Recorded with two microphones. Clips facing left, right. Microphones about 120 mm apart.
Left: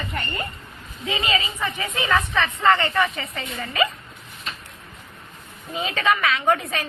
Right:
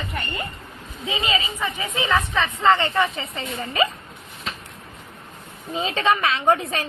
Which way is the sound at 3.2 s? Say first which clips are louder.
Right 1 dB; 30° right (ahead or behind).